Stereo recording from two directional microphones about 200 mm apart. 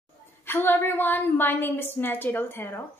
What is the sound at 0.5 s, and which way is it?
A woman's voice, 10° left (ahead or behind).